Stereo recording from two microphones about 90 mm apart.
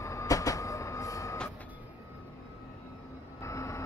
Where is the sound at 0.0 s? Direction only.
35° left (ahead or behind).